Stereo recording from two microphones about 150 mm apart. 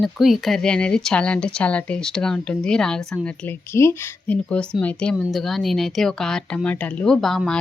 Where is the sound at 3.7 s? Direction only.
20° left (ahead or behind).